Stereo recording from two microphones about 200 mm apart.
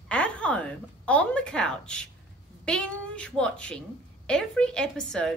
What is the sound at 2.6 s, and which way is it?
A woman's voice, 5° left (ahead or behind).